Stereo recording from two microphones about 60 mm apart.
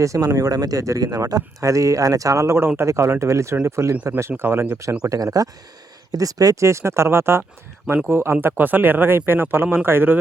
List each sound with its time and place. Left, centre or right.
0.0 s speech: right
0.4 s speech: right
2.6 s speech: right
5.0 s speech: right